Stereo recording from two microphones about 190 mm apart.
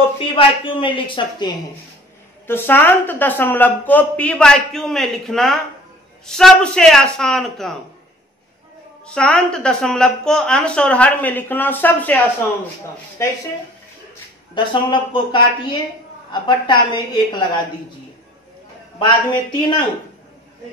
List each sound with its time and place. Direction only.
0.2 s a woman's voice: 25° left (ahead or behind)
2.4 s a woman's voice: 10° left (ahead or behind)
9.0 s a woman's voice: 5° left (ahead or behind)
14.5 s a woman's voice: 25° left (ahead or behind)
18.9 s a woman's voice: 25° left (ahead or behind)